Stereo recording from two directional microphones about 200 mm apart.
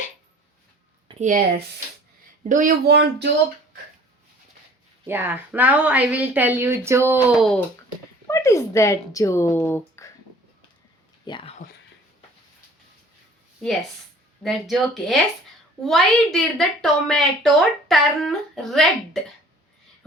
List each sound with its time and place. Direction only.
1.2 s speech: 40° right (ahead or behind)
5.0 s speech: 10° right (ahead or behind)
8.3 s speech: 15° left (ahead or behind)
11.3 s speech: 25° left (ahead or behind)
14.4 s a woman's voice: centre (ahead or behind)